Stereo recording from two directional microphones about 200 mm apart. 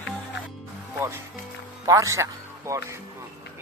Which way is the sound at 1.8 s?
15° right (ahead or behind).